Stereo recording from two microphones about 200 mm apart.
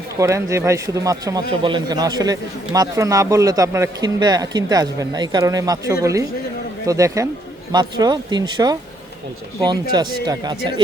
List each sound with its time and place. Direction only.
0.2 s a man's voice: 15° right (ahead or behind)